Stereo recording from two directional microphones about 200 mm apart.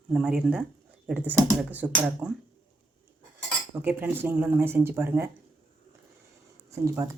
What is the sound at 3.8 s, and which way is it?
Speech, 10° right (ahead or behind).